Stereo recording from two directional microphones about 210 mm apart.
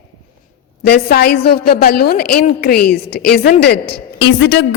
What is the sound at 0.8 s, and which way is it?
A woman's voice, 50° left (ahead or behind).